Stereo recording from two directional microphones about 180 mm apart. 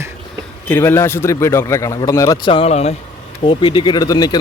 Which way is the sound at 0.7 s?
10° left (ahead or behind).